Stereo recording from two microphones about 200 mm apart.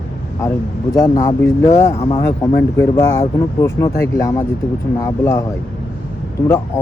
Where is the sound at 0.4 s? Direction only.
15° left (ahead or behind).